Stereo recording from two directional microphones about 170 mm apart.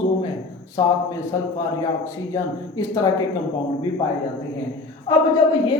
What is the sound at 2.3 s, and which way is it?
Speech, 20° left (ahead or behind).